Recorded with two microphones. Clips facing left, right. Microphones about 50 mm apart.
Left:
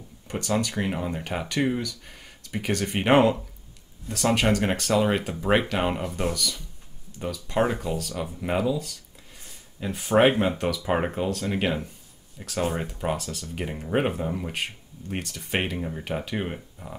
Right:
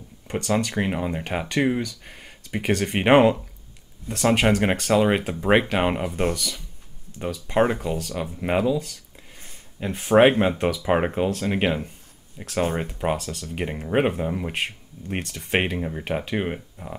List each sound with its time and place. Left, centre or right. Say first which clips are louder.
0.3 s speech: right 3 dB; right
9.4 s a sound: right 3 dB; right
10.6 s speech: right 4 dB; right